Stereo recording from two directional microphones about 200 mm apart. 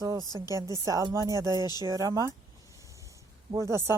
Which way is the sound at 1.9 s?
20° right (ahead or behind).